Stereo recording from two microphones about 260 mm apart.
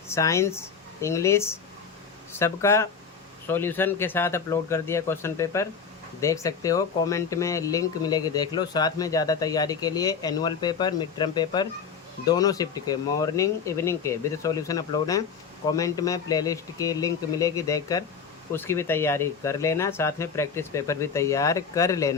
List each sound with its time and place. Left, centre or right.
0.1 s speech: centre